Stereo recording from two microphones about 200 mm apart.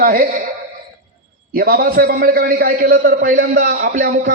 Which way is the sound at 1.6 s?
45° right (ahead or behind).